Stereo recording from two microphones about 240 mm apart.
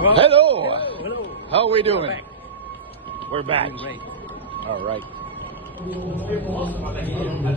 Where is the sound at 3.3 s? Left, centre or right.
Right.